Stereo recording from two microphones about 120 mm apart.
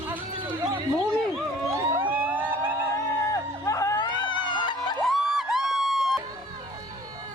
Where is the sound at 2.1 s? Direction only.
15° right (ahead or behind).